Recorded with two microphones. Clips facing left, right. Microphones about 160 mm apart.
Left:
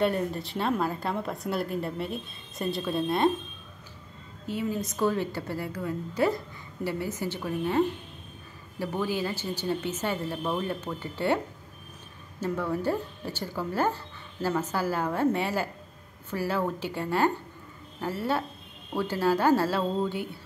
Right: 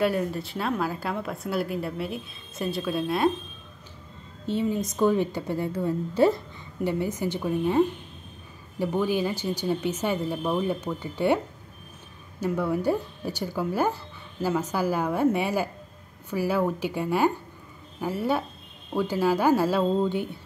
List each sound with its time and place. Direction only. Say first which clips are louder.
0.0 s speech: right 1 dB; centre (ahead or behind)
4.5 s a woman's voice: right 4 dB; 25° right (ahead or behind)
12.4 s speech: right 3 dB; 10° right (ahead or behind)